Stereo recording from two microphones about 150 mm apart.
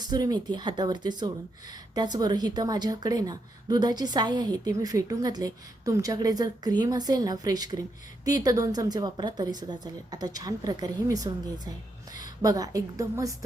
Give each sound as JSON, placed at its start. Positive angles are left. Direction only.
{"t": 0.0, "sound": "a woman's voice", "side_deg": -25}